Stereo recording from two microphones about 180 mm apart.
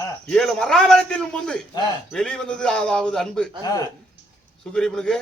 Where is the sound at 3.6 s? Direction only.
20° left (ahead or behind).